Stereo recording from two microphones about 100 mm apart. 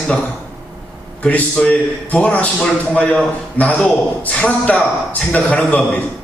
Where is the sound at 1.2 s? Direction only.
10° left (ahead or behind).